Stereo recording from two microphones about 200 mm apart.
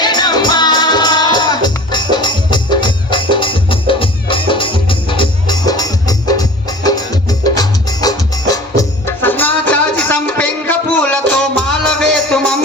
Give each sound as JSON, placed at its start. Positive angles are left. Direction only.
{"t": 0.0, "sound": "music", "side_deg": 20}